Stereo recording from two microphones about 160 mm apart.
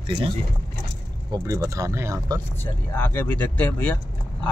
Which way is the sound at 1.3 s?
20° right (ahead or behind).